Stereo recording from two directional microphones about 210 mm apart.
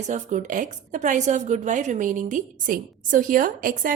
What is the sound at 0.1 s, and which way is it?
Speech, 35° right (ahead or behind).